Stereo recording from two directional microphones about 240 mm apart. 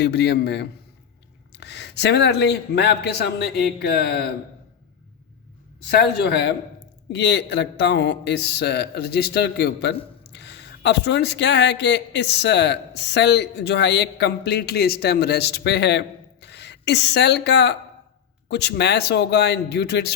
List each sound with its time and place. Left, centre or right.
0.0 s speech: left
5.8 s a man's voice: left